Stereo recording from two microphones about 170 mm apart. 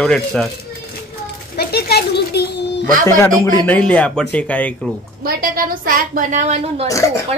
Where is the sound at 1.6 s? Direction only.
65° left (ahead or behind).